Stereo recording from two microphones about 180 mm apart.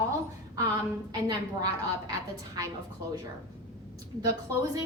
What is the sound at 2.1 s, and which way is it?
Speech, 20° right (ahead or behind).